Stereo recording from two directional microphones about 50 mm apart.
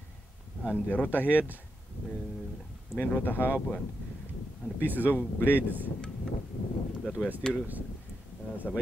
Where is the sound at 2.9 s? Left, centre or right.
Left.